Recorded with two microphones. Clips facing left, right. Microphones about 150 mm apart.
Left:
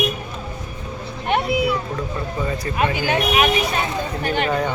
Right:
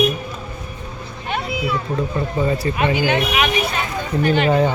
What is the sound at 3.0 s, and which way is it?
Speech, 35° left (ahead or behind).